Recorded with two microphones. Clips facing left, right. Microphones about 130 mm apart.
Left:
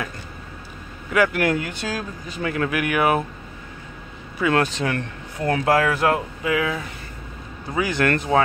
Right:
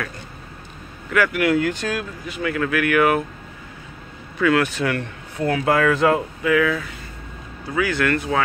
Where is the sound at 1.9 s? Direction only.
35° left (ahead or behind).